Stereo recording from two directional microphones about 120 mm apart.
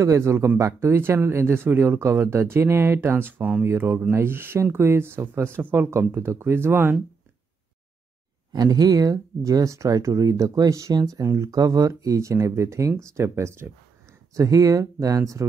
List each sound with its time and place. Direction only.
0.0 s speech: 25° right (ahead or behind)
8.5 s speech: 30° right (ahead or behind)